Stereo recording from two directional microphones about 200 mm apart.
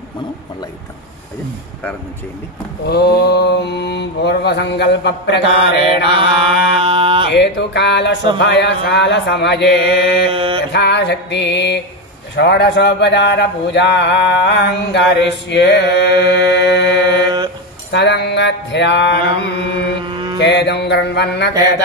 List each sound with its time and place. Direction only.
2.9 s speech: 55° left (ahead or behind)
5.8 s mantra: 25° right (ahead or behind)
7.2 s speech: 60° left (ahead or behind)
10.3 s mantra: 25° right (ahead or behind)
10.7 s speech: 55° left (ahead or behind)
20.0 s mantra: 25° right (ahead or behind)
20.3 s speech: 60° left (ahead or behind)